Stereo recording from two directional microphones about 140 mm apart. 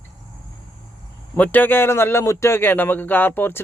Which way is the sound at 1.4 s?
15° left (ahead or behind).